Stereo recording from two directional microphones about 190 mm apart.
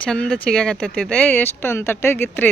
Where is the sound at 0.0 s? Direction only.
5° left (ahead or behind).